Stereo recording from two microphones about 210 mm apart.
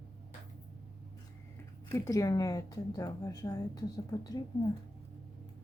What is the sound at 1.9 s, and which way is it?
A woman's voice, 15° left (ahead or behind).